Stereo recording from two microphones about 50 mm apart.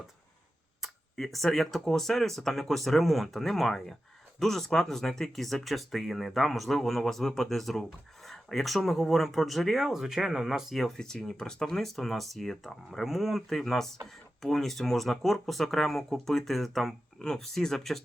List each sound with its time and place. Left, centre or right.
0.8 s speech: centre
10.8 s speech: centre
17.2 s speech: centre